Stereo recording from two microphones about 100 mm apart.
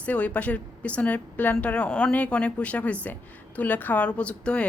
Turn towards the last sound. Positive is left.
turn(degrees=10)  # may be behind; listen again after turning